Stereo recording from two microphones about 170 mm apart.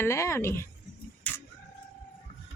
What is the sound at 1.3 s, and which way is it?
Bird, 10° left (ahead or behind).